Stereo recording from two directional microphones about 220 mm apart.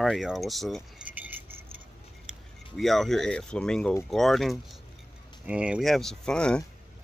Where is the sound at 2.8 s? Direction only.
Centre (ahead or behind).